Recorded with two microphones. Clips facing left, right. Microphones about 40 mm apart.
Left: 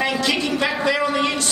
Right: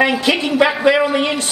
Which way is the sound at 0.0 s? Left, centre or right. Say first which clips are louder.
Right 5 dB; right.